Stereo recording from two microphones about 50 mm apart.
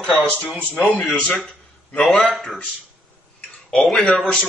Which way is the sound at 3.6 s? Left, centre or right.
Centre.